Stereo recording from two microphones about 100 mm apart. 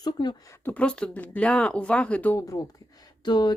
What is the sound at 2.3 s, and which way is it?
Speech, 35° left (ahead or behind).